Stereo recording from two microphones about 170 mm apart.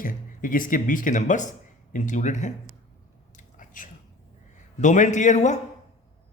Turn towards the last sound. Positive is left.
turn(degrees=45)  # may be behind; listen again after turning